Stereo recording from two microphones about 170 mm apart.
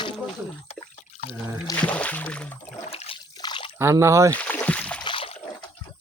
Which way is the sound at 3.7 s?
15° right (ahead or behind).